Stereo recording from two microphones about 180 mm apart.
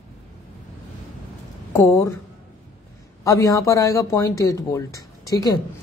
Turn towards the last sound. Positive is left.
turn(degrees=20)  # may be behind; listen again after turning